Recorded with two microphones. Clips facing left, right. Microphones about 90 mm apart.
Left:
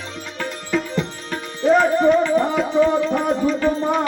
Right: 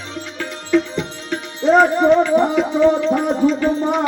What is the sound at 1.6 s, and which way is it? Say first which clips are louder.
Music: right 2 dB; 25° right (ahead or behind).